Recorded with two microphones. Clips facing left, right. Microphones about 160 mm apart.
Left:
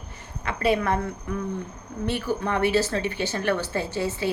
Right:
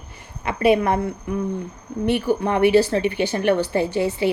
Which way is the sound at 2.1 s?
15° right (ahead or behind).